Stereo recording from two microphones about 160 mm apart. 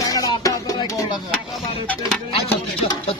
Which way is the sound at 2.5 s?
30° left (ahead or behind).